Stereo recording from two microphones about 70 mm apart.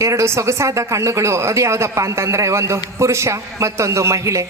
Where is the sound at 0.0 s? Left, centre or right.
Right.